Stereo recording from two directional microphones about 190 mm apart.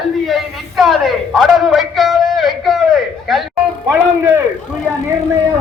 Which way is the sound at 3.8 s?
10° right (ahead or behind).